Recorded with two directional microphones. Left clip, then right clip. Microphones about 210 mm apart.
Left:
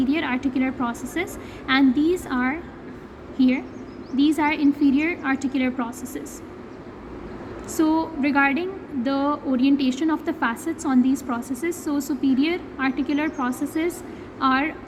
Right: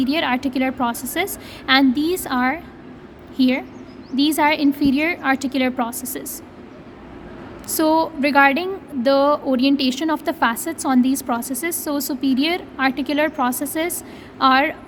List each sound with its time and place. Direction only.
0.0 s a woman's voice: 40° right (ahead or behind)
7.7 s a woman's voice: 45° right (ahead or behind)